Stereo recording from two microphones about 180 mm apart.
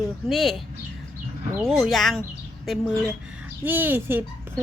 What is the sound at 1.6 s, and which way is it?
Speech, centre (ahead or behind).